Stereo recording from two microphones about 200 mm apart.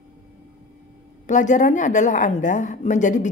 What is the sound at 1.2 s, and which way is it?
A woman's voice, 40° left (ahead or behind).